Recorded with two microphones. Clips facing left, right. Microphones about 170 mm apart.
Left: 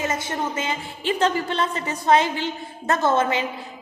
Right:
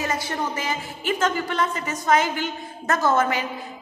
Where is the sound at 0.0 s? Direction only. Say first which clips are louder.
Left 1 dB; 20° left (ahead or behind).